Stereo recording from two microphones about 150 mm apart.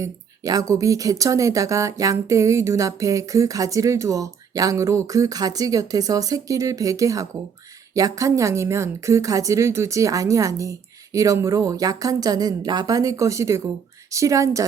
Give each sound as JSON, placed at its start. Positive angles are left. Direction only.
{"t": 0.0, "sound": "speech", "side_deg": -25}